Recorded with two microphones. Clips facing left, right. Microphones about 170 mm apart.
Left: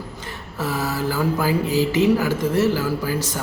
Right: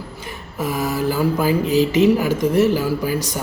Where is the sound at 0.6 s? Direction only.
10° right (ahead or behind).